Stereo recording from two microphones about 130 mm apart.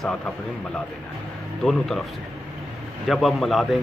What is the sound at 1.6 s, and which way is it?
Speech, 5° left (ahead or behind).